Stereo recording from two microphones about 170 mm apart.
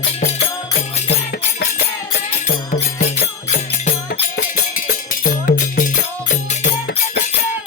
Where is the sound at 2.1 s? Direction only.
40° left (ahead or behind).